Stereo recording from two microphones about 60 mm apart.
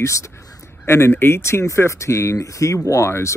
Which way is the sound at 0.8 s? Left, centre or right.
Left.